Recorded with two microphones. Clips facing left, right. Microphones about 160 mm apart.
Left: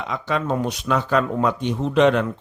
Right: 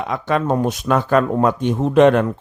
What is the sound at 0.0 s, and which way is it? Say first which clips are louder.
A man's voice: right 5 dB; 50° right (ahead or behind).